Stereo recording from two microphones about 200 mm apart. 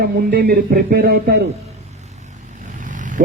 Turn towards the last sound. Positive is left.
turn(degrees=-40)  # may be behind; listen again after turning